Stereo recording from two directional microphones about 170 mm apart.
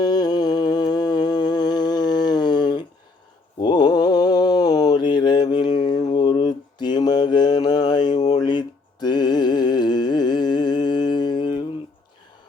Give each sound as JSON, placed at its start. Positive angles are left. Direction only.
{"t": 0.0, "sound": "humming", "side_deg": 25}
{"t": 3.6, "sound": "mantra", "side_deg": 25}